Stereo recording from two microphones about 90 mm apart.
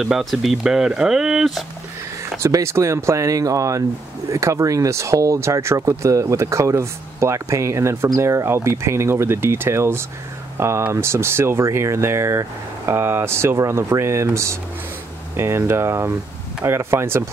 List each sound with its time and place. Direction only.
0.0 s speech: centre (ahead or behind)
2.4 s speech: 30° right (ahead or behind)